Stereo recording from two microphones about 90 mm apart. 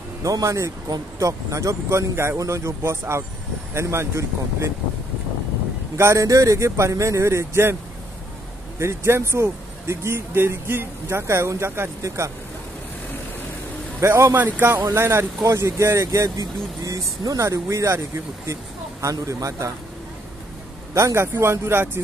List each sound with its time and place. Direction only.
0.2 s speech: 40° right (ahead or behind)
5.9 s speech: 35° right (ahead or behind)
8.7 s speech: 30° right (ahead or behind)
14.0 s speech: 30° right (ahead or behind)
20.9 s speech: 35° right (ahead or behind)